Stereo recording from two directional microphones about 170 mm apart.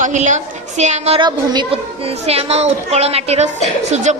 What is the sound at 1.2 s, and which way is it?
A woman's voice, 25° right (ahead or behind).